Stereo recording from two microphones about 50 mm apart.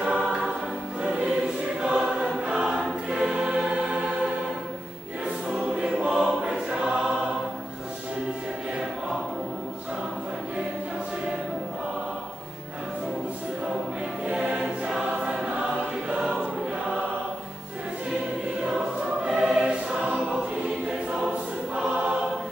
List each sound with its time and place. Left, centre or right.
0.0 s choir: centre
1.0 s music: centre
1.8 s choir: centre
5.5 s choir: centre
14.3 s choir: centre
19.2 s choir: centre